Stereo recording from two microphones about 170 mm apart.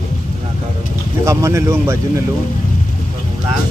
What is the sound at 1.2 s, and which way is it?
Speech, 15° right (ahead or behind).